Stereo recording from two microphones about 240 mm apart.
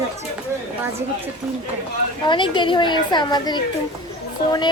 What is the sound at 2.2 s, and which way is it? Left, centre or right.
A child's voice, centre.